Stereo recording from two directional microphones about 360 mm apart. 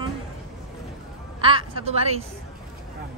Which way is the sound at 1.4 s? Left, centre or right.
Centre.